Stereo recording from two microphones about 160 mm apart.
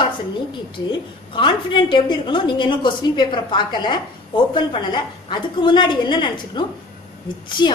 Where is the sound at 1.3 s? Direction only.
30° left (ahead or behind).